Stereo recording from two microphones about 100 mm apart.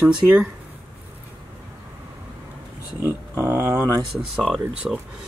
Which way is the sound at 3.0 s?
25° right (ahead or behind).